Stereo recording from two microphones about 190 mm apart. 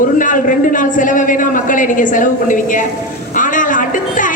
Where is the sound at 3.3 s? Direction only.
45° left (ahead or behind).